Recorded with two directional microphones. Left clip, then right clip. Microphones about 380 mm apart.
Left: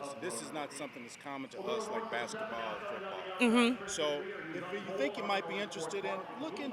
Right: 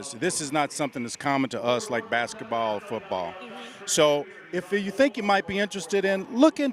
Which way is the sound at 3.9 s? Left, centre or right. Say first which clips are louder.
Right 13 dB; right.